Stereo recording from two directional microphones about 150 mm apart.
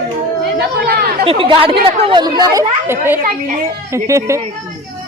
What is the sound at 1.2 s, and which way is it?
A woman's voice, 35° right (ahead or behind).